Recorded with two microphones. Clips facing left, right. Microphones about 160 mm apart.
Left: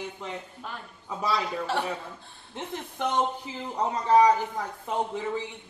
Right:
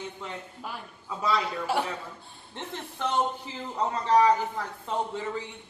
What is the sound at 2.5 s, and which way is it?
A woman's voice, 15° left (ahead or behind).